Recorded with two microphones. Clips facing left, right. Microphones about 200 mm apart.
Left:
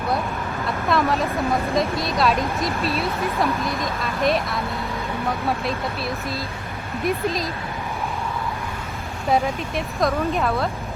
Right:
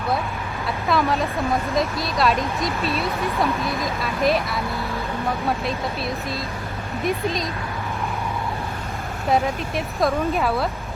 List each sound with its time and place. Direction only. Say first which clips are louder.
0.9 s speech: even; centre (ahead or behind)
7.0 s speech: left 1 dB; centre (ahead or behind)
9.3 s speech: even; centre (ahead or behind)